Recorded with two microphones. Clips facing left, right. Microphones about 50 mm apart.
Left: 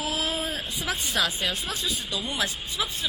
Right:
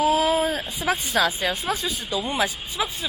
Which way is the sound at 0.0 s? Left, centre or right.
Centre.